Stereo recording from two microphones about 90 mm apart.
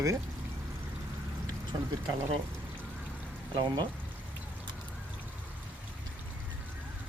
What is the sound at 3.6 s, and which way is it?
Speech, 55° right (ahead or behind).